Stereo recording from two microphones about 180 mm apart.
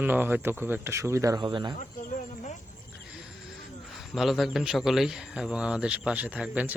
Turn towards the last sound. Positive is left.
turn(degrees=-5)  # may be behind; listen again after turning